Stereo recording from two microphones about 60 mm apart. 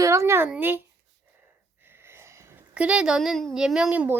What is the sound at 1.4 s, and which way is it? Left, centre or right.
Wheeze, right.